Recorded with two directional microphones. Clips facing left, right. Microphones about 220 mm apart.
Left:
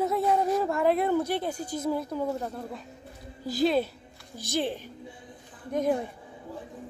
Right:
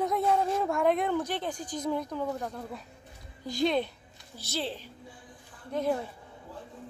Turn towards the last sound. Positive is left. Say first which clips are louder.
# left 3 dB
turn(degrees=15)  # may be behind; listen again after turning